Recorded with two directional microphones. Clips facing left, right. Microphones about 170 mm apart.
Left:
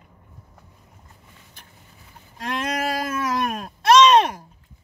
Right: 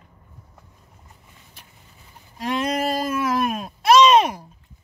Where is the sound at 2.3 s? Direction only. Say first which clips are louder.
Right 3 dB; 5° right (ahead or behind).